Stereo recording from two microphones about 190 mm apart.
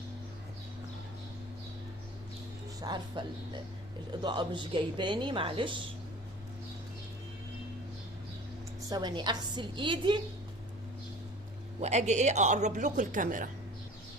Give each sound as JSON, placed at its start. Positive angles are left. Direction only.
{"t": 2.8, "sound": "a woman's voice", "side_deg": -25}
{"t": 8.9, "sound": "a woman's voice", "side_deg": -25}
{"t": 11.8, "sound": "a man's voice", "side_deg": -35}